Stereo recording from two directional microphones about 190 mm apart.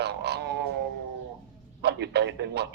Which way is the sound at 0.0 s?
60° right (ahead or behind).